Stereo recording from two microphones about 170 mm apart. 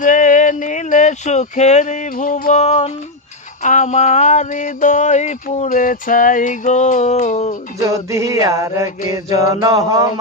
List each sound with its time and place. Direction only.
0.0 s speech: 50° left (ahead or behind)
3.6 s a sound: 45° left (ahead or behind)
7.8 s music: 20° right (ahead or behind)
9.1 s mantra: 20° right (ahead or behind)